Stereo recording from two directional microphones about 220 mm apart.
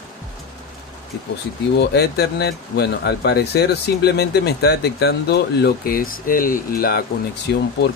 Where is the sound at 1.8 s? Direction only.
50° left (ahead or behind).